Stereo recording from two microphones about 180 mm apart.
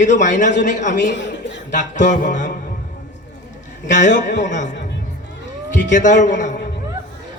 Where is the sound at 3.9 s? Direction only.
45° left (ahead or behind).